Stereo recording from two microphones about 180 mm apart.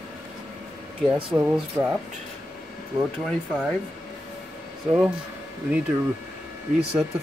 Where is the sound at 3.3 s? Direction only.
Centre (ahead or behind).